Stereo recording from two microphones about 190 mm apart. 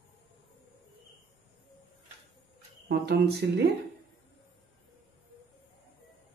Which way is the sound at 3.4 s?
60° right (ahead or behind).